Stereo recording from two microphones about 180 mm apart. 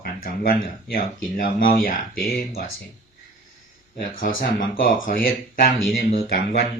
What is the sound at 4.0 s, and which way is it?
Speech, 50° left (ahead or behind).